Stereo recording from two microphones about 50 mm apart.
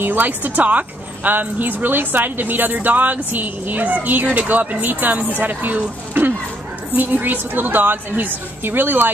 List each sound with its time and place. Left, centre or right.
0.0 s speech: right